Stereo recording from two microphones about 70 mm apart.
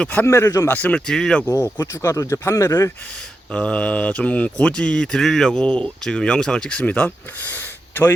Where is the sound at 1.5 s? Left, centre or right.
Left.